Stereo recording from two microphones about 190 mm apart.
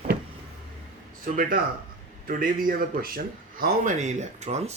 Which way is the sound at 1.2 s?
50° right (ahead or behind).